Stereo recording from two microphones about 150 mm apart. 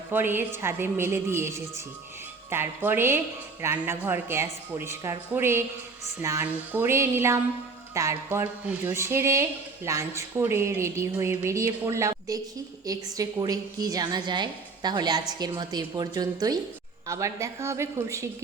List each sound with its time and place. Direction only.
0.1 s a woman's voice: 15° right (ahead or behind)